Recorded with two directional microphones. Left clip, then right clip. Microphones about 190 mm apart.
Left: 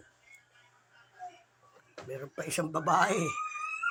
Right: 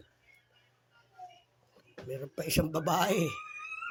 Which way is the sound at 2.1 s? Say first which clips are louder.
Right 2 dB; 35° right (ahead or behind).